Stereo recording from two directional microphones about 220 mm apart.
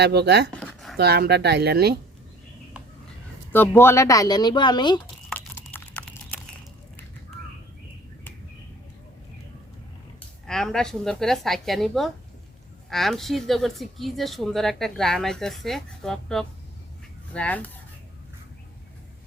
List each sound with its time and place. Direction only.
0.0 s speech: 50° right (ahead or behind)
0.5 s a sound: 5° left (ahead or behind)
0.9 s speech: 45° right (ahead or behind)
3.5 s speech: 10° left (ahead or behind)
5.3 s a sound: 10° left (ahead or behind)
10.4 s speech: centre (ahead or behind)